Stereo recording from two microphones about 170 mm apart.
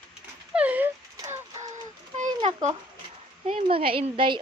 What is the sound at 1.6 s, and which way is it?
Child singing, 45° right (ahead or behind).